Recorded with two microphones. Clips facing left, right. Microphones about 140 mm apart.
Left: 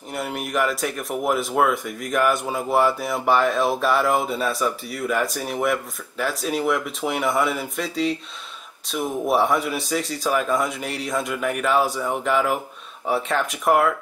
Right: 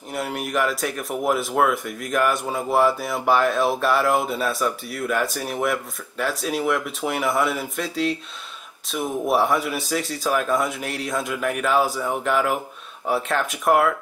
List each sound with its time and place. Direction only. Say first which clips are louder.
0.1 s speech: right 1 dB; centre (ahead or behind)